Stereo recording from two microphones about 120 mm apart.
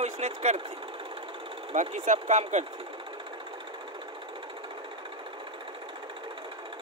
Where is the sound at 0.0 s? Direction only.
65° right (ahead or behind).